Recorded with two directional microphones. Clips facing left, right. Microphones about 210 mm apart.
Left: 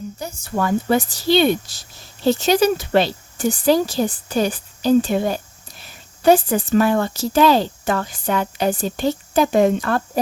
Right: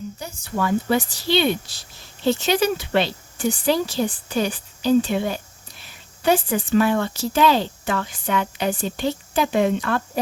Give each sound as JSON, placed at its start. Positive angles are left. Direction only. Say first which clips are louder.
{"t": 0.2, "sound": "speech", "louder": "left 3 dB", "side_deg": 40}